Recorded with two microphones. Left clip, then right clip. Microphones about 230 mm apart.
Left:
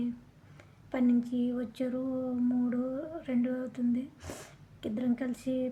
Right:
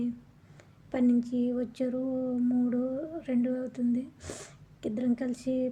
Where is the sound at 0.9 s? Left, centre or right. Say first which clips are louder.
Right 2 dB; centre.